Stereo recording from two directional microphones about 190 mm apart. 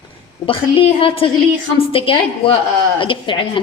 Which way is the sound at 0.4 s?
30° left (ahead or behind).